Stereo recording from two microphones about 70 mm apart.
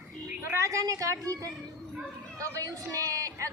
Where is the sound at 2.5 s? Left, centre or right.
Right.